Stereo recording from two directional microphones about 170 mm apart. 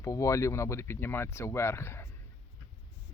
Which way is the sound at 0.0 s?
20° left (ahead or behind).